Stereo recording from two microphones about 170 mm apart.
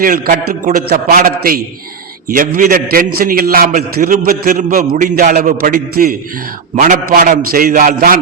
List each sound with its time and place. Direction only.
0.0 s a man's voice: 50° right (ahead or behind)